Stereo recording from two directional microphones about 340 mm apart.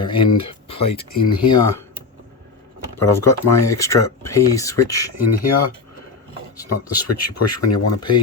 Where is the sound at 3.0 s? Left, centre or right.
Centre.